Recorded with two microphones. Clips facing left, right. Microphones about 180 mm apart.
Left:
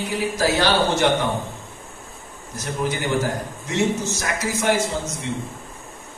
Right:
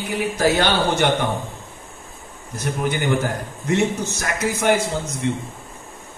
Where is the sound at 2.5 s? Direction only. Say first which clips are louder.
Right 2 dB; 55° right (ahead or behind).